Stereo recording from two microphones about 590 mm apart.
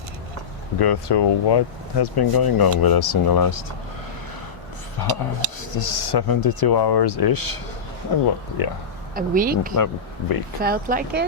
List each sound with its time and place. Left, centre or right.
0.8 s speech: left
5.0 s speech: left
9.1 s speech: centre
9.7 s speech: left
10.6 s speech: centre